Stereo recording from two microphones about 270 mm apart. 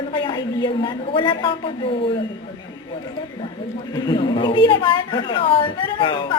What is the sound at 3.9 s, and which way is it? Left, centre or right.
A woman's voice, centre.